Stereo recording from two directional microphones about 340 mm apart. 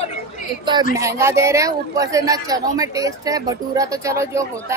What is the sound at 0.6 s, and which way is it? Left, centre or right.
A woman's voice, centre.